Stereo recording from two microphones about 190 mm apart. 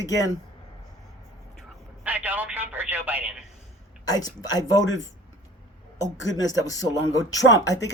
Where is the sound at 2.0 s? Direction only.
10° right (ahead or behind).